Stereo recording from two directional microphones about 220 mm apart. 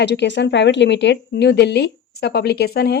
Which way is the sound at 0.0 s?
50° left (ahead or behind).